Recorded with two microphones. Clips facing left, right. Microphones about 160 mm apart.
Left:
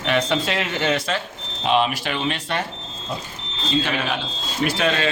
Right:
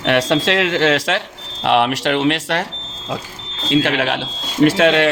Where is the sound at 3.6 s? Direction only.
90° right.